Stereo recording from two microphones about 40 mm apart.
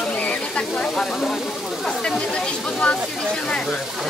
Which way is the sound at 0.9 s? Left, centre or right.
Centre.